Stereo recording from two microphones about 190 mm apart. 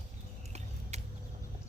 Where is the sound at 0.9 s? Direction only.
35° right (ahead or behind).